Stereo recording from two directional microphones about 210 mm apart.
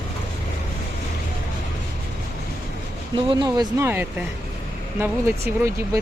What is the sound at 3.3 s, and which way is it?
Speech, 20° right (ahead or behind).